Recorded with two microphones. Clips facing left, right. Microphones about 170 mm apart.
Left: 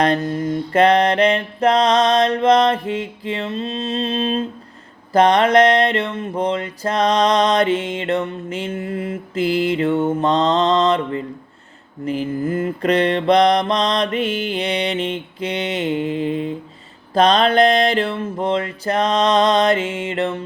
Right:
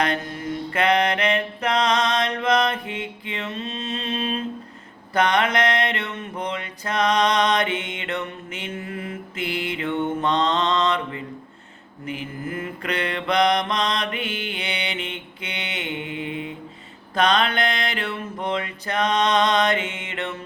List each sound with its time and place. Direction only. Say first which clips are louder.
0.0 s mantra: left 7 dB; 35° left (ahead or behind)